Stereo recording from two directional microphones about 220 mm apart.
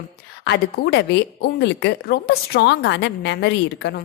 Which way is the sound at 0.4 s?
50° left (ahead or behind).